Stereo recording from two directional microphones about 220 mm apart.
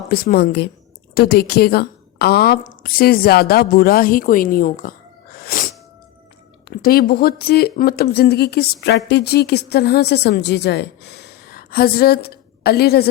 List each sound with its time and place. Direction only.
0.1 s a woman's voice: 45° left (ahead or behind)
5.4 s music: 40° left (ahead or behind)
6.7 s a woman's voice: 45° left (ahead or behind)